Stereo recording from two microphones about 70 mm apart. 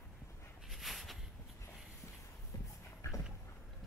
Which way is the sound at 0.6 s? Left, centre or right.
Centre.